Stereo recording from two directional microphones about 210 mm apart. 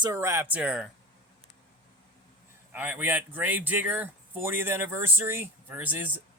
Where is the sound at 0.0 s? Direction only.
15° right (ahead or behind).